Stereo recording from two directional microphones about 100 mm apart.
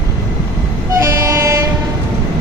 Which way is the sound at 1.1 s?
30° right (ahead or behind).